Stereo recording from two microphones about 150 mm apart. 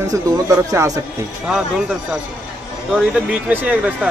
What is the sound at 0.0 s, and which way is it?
Speech, 20° right (ahead or behind).